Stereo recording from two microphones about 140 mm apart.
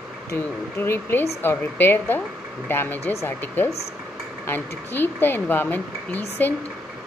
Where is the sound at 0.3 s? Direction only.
15° left (ahead or behind).